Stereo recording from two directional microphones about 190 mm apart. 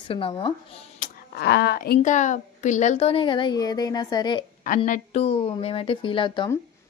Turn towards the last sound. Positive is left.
turn(degrees=25)  # may be behind; listen again after turning